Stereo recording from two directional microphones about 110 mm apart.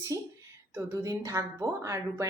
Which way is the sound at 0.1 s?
30° right (ahead or behind).